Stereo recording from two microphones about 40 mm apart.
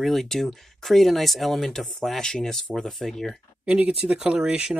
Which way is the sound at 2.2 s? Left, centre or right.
Centre.